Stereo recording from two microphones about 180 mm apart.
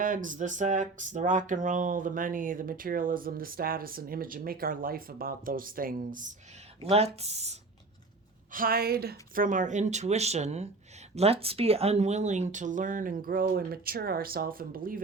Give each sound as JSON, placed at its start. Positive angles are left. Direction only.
{"t": 0.0, "sound": "speech", "side_deg": -45}
{"t": 6.8, "sound": "speech", "side_deg": -35}
{"t": 8.5, "sound": "speech", "side_deg": -55}